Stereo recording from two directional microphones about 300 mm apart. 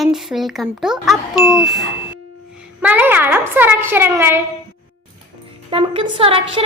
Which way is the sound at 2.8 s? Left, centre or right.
Centre.